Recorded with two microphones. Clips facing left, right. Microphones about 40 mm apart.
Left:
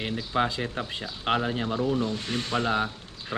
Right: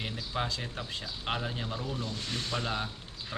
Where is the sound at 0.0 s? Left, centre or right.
Left.